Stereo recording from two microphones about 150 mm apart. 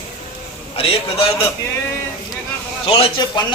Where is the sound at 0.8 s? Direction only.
40° left (ahead or behind).